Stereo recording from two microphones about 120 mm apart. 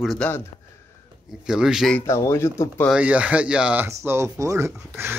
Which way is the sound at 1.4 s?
5° right (ahead or behind).